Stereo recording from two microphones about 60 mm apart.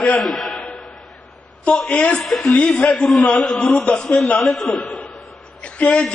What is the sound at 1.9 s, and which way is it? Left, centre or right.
Speech, left.